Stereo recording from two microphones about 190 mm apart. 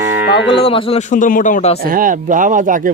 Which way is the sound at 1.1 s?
45° left (ahead or behind).